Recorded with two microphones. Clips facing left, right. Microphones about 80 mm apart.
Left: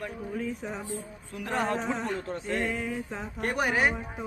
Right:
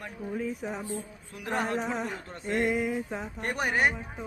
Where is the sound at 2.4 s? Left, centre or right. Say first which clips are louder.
Right 6 dB; centre.